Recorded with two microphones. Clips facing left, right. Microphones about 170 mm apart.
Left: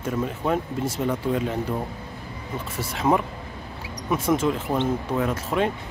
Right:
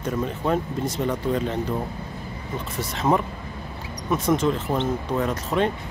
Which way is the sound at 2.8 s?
10° left (ahead or behind).